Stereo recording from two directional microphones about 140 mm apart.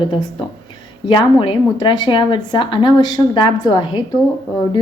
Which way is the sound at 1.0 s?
35° left (ahead or behind).